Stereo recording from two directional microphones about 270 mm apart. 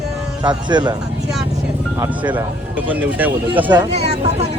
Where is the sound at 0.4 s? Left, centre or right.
Centre.